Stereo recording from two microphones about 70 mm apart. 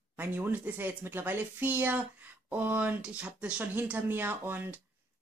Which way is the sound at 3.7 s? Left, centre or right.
Right.